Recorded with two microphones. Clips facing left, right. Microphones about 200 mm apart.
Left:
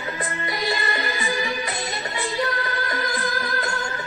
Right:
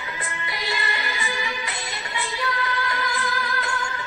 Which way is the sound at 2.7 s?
45° left (ahead or behind).